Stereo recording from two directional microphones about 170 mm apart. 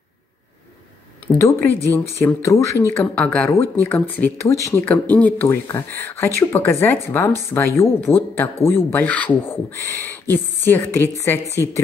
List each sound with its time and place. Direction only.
1.4 s a woman's voice: 15° left (ahead or behind)